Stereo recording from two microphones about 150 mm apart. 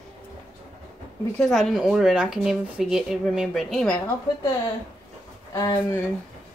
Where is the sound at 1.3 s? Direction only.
5° left (ahead or behind).